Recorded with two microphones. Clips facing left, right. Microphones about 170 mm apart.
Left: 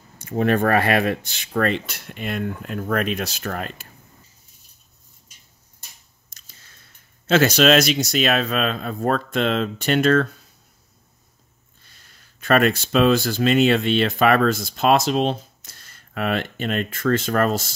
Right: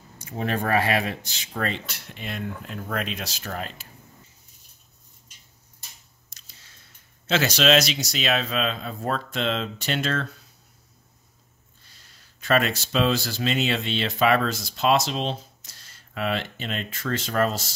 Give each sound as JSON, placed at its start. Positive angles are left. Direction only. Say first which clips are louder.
{"t": 0.2, "sound": "speech", "louder": "left 8 dB", "side_deg": 60}
{"t": 6.3, "sound": "a sound", "louder": "left 2 dB", "side_deg": 50}
{"t": 7.2, "sound": "speech", "louder": "left 5 dB", "side_deg": 50}
{"t": 11.9, "sound": "speech", "louder": "left 2 dB", "side_deg": 55}